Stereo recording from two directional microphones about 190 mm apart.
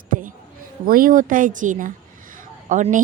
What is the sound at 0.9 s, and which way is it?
A woman's voice, 50° right (ahead or behind).